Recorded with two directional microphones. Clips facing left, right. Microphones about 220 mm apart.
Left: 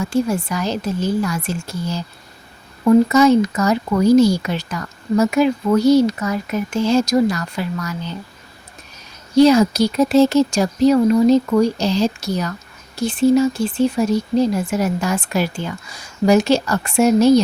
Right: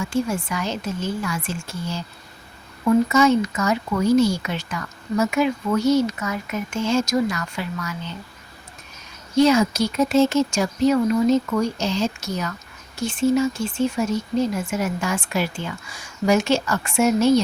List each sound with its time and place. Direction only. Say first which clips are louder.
0.0 s speech: left 4 dB; 40° left (ahead or behind)
3.1 s speech: left 5 dB; 35° left (ahead or behind)
9.3 s speech: left 5 dB; 35° left (ahead or behind)